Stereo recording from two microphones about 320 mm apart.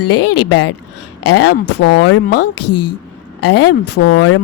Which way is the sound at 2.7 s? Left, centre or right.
Left.